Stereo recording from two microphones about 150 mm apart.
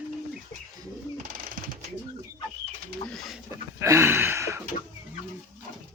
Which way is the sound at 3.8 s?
20° right (ahead or behind).